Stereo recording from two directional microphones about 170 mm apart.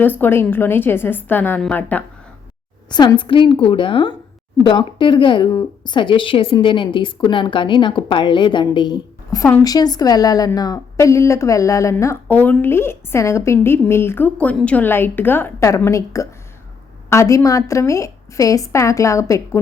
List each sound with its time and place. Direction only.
0.0 s a woman's voice: 10° left (ahead or behind)
2.9 s a woman's voice: 25° left (ahead or behind)